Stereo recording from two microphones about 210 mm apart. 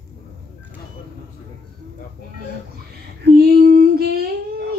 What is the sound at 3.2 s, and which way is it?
Female singing, 50° right (ahead or behind).